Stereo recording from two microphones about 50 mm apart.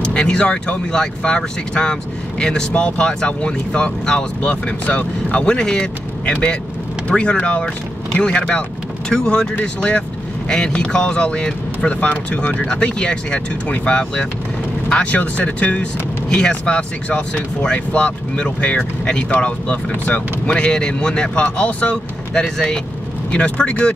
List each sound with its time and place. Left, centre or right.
0.0 s speech: centre
16.3 s speech: centre
22.3 s speech: centre